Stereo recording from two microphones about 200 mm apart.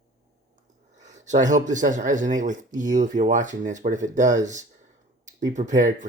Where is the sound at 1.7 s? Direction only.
40° right (ahead or behind).